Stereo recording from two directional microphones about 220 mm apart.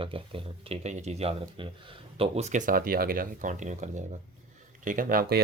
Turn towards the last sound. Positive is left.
turn(degrees=-40)  # may be behind; listen again after turning